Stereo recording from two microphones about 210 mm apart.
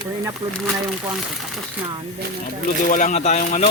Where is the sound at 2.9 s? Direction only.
40° left (ahead or behind).